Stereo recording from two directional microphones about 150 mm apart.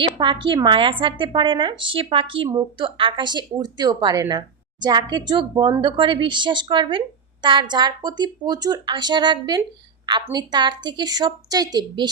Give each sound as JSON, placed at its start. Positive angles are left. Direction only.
{"t": 0.2, "sound": "a woman's voice", "side_deg": -30}